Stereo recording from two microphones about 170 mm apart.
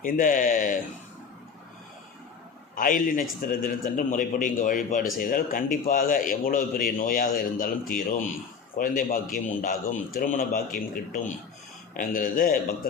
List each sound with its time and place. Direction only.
0.0 s a man's voice: 50° left (ahead or behind)
2.7 s a man's voice: 55° left (ahead or behind)